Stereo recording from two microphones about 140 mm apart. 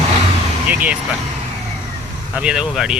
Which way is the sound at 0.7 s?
10° right (ahead or behind).